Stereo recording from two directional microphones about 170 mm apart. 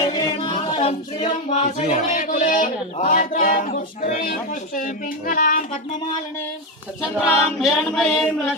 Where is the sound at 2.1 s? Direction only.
50° left (ahead or behind).